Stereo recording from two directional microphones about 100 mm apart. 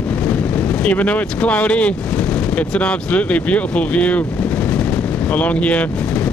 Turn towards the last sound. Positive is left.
turn(degrees=10)  # may be behind; listen again after turning